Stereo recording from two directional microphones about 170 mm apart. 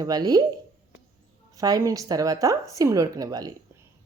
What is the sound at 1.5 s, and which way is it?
A woman's voice, 20° right (ahead or behind).